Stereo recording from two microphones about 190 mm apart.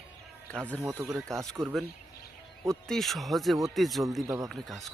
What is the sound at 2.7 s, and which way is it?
Speech, centre (ahead or behind).